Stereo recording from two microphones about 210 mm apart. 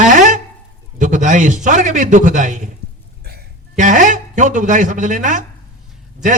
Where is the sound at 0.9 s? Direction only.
35° right (ahead or behind).